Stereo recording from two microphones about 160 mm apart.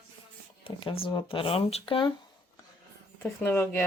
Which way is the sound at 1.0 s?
30° left (ahead or behind).